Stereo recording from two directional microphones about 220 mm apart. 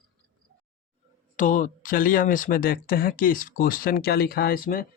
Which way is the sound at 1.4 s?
35° left (ahead or behind).